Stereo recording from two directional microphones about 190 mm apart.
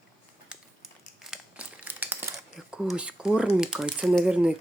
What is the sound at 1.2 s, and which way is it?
Crumpling, 5° right (ahead or behind).